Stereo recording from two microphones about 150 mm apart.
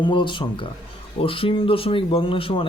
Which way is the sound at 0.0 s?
35° left (ahead or behind).